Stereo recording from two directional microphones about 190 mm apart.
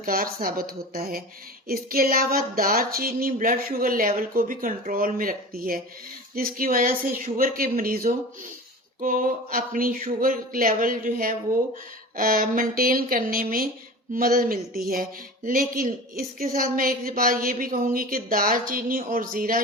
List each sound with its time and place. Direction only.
0.0 s speech: 50° right (ahead or behind)